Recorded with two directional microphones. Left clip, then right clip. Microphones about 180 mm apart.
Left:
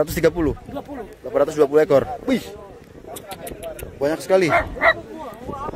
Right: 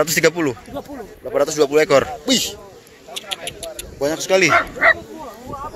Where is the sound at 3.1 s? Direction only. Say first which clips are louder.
Right 7 dB; 30° left (ahead or behind); by 4.9 s 15° left (ahead or behind).